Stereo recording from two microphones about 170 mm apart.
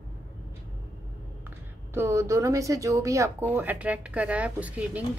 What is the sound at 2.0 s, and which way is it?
Speech, 15° right (ahead or behind).